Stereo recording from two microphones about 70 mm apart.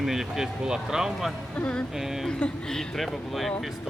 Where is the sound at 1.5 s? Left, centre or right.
Centre.